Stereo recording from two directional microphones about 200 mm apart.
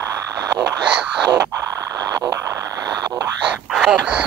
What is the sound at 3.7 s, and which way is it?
Speech, centre (ahead or behind).